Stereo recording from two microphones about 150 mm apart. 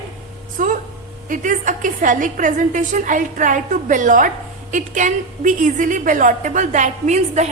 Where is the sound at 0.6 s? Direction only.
60° right (ahead or behind).